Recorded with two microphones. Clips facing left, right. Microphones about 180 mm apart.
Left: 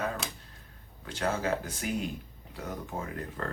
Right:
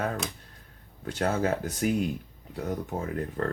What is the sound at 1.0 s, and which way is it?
Speech, 45° right (ahead or behind).